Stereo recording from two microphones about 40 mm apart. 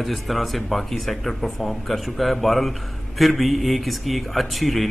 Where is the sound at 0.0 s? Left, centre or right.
Centre.